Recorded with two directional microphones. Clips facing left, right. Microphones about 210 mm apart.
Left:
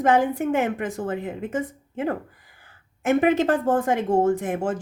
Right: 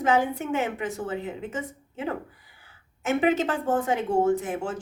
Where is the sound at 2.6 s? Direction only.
50° left (ahead or behind).